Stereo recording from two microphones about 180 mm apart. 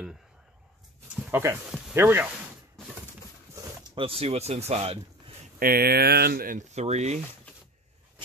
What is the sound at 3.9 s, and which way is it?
Speech, 30° right (ahead or behind).